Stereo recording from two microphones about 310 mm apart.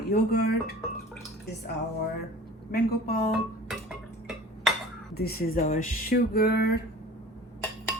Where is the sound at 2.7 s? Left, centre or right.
Left.